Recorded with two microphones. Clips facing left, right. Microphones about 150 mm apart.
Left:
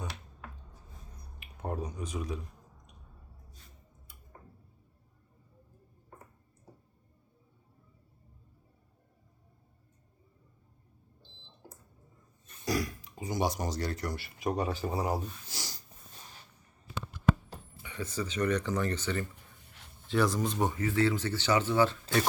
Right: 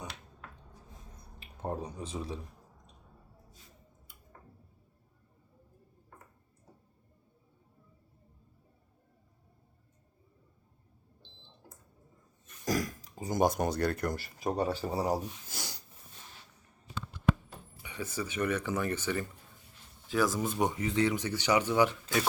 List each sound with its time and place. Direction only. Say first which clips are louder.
1.4 s speech: even; 25° right (ahead or behind)
12.6 s speech: even; 45° right (ahead or behind)
15.4 s speech: right 1 dB; 55° right (ahead or behind)
17.8 s speech: left 1 dB; 10° right (ahead or behind)